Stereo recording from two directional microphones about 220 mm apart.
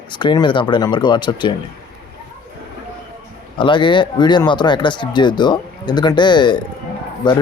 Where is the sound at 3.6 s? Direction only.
20° left (ahead or behind).